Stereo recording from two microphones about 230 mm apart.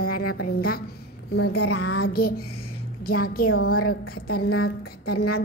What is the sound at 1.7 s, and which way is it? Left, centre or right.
Speech, left.